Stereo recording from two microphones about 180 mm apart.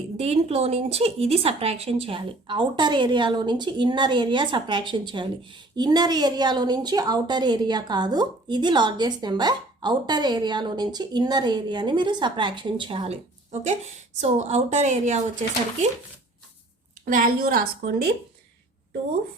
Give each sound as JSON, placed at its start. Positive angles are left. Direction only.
{"t": 0.2, "sound": "a woman's voice", "side_deg": -35}
{"t": 17.1, "sound": "a woman's voice", "side_deg": -50}